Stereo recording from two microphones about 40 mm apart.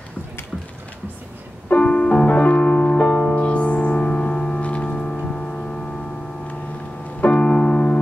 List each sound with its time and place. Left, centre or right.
1.7 s music: left
4.8 s singing bowl: left
5.2 s a sound: left
7.2 s music: left